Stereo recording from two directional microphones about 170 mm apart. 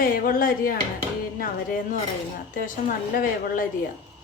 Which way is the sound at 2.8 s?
55° left (ahead or behind).